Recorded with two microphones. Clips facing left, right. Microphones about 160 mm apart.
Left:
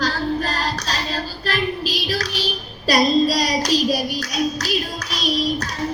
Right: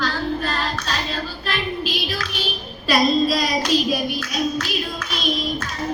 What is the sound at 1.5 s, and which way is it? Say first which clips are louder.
Child singing: left 2 dB; 40° left (ahead or behind).